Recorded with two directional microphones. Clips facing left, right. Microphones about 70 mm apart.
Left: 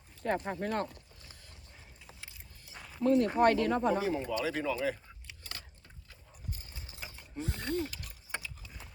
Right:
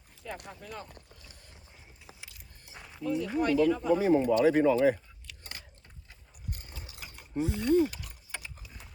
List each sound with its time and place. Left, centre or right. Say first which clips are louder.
0.2 s speech: left 9 dB; left
2.7 s a sound: even; centre
3.0 s speech: left 5 dB; left
3.2 s speech: left 2 dB; left
3.5 s speech: right 4 dB; left
4.0 s speech: right 9 dB; right
6.5 s ratchet: right 3 dB; right
6.7 s ratchet: right 3 dB; right
7.3 s speech: right 10 dB; centre